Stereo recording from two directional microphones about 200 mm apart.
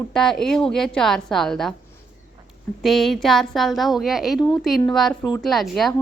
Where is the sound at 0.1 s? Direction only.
Centre (ahead or behind).